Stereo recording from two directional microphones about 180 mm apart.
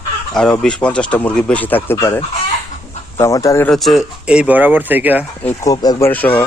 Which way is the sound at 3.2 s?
15° left (ahead or behind).